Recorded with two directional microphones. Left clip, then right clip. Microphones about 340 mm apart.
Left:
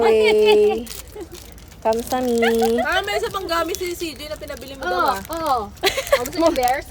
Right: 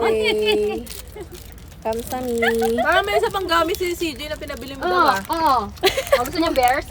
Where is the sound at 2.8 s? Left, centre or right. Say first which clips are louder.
Right 3 dB; centre.